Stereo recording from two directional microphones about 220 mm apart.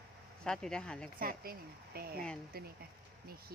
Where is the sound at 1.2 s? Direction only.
40° right (ahead or behind).